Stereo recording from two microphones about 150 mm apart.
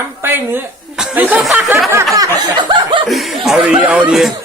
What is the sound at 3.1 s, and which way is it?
Speech, centre (ahead or behind).